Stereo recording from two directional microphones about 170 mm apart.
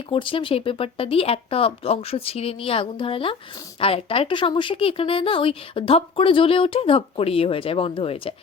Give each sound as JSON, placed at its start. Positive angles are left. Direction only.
{"t": 0.1, "sound": "speech", "side_deg": 30}